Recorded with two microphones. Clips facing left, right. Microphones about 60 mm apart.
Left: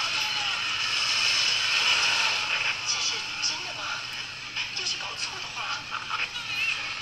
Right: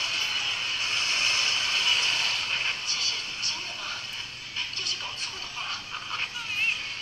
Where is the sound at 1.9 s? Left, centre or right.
Left.